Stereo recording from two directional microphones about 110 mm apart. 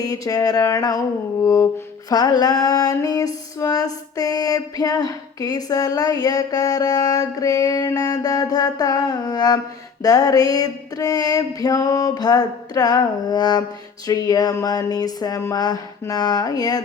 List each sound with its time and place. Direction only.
0.0 s female singing: 35° left (ahead or behind)
2.0 s female singing: 35° left (ahead or behind)